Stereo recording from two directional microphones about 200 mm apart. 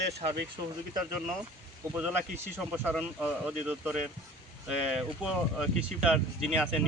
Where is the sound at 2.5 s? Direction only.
10° right (ahead or behind).